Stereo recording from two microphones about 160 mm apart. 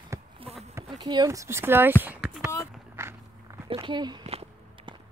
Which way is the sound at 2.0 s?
10° right (ahead or behind).